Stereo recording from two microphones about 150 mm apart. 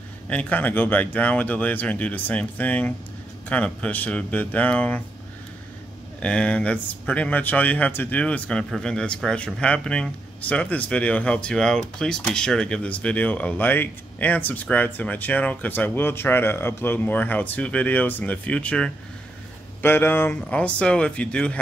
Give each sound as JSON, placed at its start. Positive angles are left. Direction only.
{"t": 0.3, "sound": "speech", "side_deg": 10}
{"t": 6.2, "sound": "speech", "side_deg": 5}